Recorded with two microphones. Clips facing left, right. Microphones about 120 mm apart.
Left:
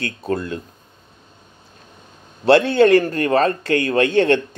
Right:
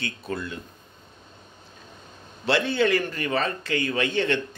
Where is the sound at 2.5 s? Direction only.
50° left (ahead or behind).